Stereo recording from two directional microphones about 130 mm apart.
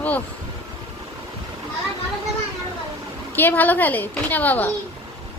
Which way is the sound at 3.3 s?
15° left (ahead or behind).